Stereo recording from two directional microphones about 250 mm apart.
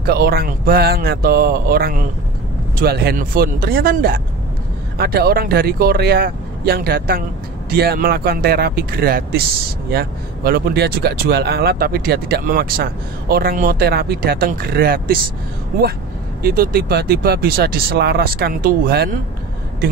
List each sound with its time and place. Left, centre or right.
0.0 s speech: right
16.4 s speech: right